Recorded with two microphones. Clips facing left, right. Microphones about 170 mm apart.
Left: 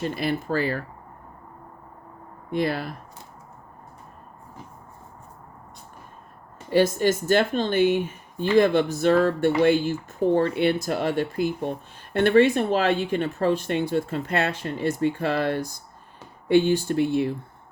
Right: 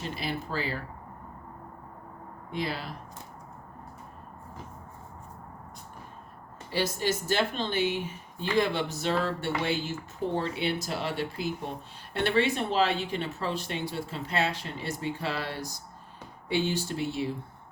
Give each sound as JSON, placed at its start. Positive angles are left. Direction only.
{"t": 0.2, "sound": "speech", "side_deg": 55}
{"t": 2.5, "sound": "speech", "side_deg": 55}
{"t": 6.7, "sound": "speech", "side_deg": 50}